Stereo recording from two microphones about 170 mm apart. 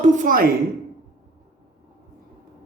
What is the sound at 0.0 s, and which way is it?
Speech, 45° right (ahead or behind).